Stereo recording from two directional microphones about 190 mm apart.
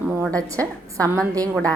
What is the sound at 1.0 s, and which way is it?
Speech, 20° right (ahead or behind).